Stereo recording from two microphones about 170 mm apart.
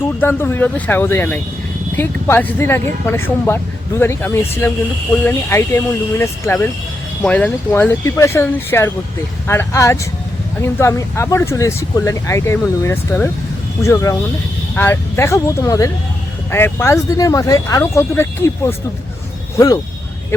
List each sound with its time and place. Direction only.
0.0 s speech: 15° left (ahead or behind)